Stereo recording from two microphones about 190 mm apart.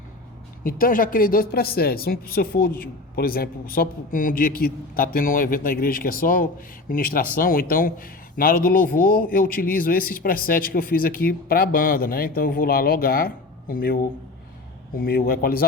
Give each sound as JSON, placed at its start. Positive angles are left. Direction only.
{"t": 0.6, "sound": "speech", "side_deg": 50}
{"t": 15.0, "sound": "speech", "side_deg": 50}